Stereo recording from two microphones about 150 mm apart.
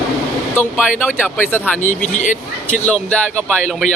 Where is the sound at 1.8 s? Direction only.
55° left (ahead or behind).